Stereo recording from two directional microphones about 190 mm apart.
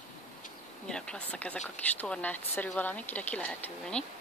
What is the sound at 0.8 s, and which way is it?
Speech, 5° left (ahead or behind).